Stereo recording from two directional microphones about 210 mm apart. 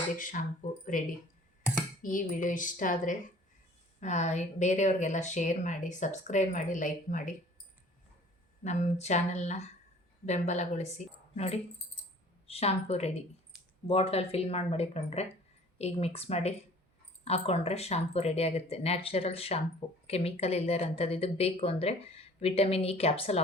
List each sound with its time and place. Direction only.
0.2 s speech: 40° left (ahead or behind)
8.6 s speech: 35° left (ahead or behind)